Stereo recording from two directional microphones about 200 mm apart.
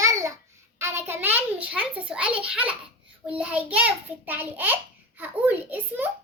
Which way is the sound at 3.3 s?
5° right (ahead or behind).